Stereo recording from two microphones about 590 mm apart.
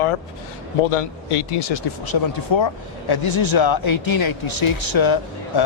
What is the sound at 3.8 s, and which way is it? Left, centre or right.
Speech, left.